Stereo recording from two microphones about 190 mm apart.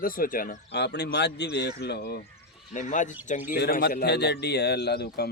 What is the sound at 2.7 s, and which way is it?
Speech, 40° left (ahead or behind).